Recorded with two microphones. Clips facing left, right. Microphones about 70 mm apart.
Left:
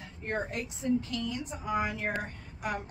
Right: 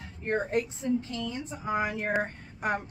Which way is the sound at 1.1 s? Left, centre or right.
Right.